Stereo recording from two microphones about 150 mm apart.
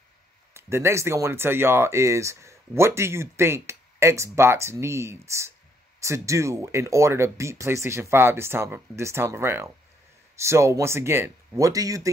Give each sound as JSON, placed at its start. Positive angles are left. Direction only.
{"t": 0.6, "sound": "speech", "side_deg": -15}